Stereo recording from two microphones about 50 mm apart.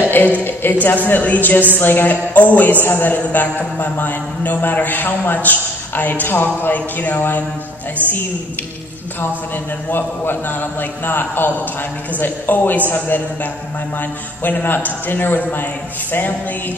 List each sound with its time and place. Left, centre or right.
0.4 s a woman's voice: left
8.0 s a man's voice: right
9.8 s a woman's voice: left